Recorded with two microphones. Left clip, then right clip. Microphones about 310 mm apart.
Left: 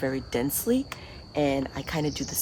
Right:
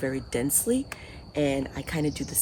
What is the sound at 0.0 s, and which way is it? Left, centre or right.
Speech, centre.